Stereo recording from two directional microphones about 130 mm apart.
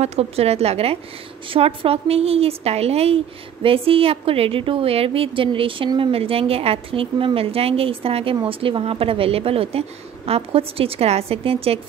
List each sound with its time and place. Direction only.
0.0 s a woman's voice: 55° right (ahead or behind)